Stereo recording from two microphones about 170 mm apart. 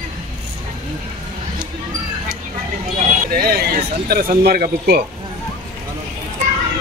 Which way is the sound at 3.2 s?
60° right (ahead or behind).